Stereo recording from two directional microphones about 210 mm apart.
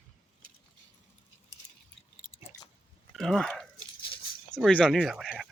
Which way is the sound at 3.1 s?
Centre (ahead or behind).